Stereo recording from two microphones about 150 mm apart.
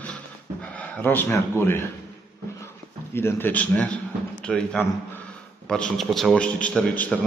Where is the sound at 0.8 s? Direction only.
10° left (ahead or behind).